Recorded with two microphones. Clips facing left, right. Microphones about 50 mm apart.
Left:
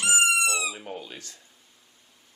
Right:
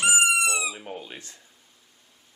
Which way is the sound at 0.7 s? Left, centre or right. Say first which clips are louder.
Even; centre.